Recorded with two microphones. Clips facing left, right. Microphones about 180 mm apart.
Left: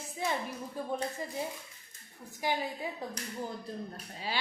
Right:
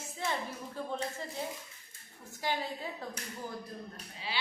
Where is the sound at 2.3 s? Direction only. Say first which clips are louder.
Left 2 dB; 15° left (ahead or behind).